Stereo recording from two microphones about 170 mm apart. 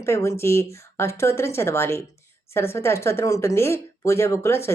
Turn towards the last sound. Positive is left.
turn(degrees=15)  # may be behind; listen again after turning